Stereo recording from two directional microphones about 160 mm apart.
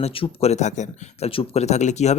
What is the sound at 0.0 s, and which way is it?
A man's voice, 35° left (ahead or behind).